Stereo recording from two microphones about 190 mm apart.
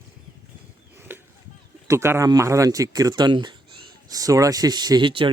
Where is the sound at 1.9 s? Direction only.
15° right (ahead or behind).